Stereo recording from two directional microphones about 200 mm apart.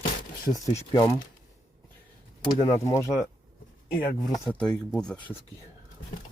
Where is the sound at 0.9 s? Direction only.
20° left (ahead or behind).